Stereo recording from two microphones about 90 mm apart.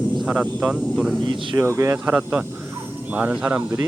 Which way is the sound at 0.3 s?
10° right (ahead or behind).